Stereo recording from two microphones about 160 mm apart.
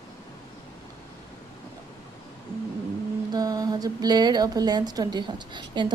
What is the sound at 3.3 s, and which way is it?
Speech, 25° right (ahead or behind).